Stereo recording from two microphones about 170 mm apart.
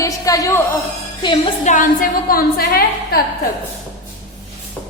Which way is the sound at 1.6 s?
50° left (ahead or behind).